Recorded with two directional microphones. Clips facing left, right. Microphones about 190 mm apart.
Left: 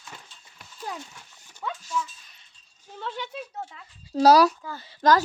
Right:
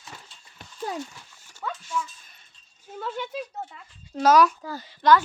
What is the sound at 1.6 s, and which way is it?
Dog, 10° left (ahead or behind).